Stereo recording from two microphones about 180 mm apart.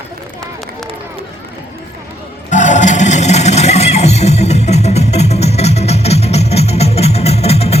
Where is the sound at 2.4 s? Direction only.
45° left (ahead or behind).